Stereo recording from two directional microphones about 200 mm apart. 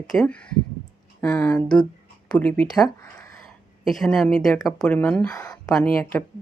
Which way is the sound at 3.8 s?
Centre (ahead or behind).